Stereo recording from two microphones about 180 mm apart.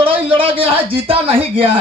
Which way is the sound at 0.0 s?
30° right (ahead or behind).